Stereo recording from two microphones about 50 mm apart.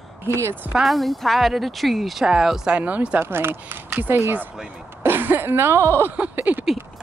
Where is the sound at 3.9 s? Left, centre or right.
Right.